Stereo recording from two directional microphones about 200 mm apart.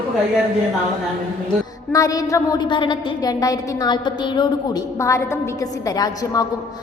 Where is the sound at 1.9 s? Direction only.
15° left (ahead or behind).